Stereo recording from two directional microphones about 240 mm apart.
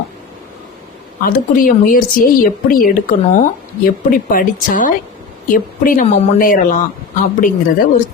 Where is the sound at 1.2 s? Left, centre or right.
Left.